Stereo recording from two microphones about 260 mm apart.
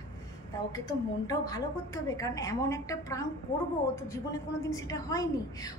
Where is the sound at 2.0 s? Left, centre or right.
Centre.